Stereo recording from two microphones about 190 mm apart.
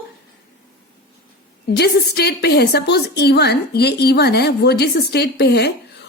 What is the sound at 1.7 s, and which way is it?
A woman's voice, 60° left (ahead or behind).